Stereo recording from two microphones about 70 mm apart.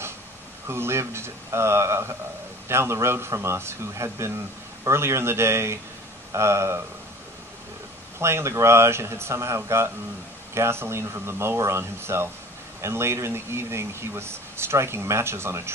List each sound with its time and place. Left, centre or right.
0.7 s speech: right
8.2 s speech: right